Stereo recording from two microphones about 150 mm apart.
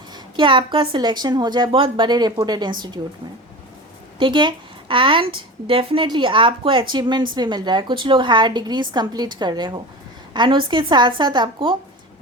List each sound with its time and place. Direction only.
0.1 s a woman's voice: 35° right (ahead or behind)
4.2 s a woman's voice: 30° right (ahead or behind)